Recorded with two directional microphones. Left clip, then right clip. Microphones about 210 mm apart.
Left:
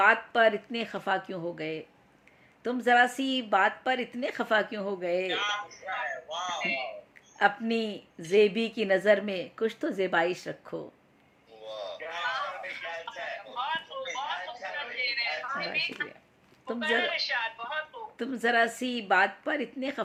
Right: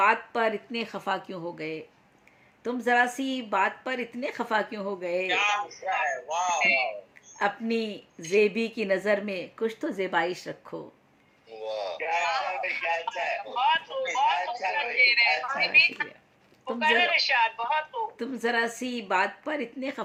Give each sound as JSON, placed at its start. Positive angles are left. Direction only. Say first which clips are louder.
{"t": 0.0, "sound": "a woman's voice", "louder": "left 1 dB", "side_deg": 5}
{"t": 5.3, "sound": "a woman's voice", "louder": "right 5 dB", "side_deg": -30}
{"t": 7.3, "sound": "a woman's voice", "louder": "left 1 dB", "side_deg": 5}
{"t": 11.5, "sound": "a sound", "louder": "right 6 dB", "side_deg": -30}
{"t": 16.8, "sound": "a woman's voice", "louder": "right 6 dB", "side_deg": -30}
{"t": 18.2, "sound": "a woman's voice", "louder": "left 3 dB", "side_deg": 5}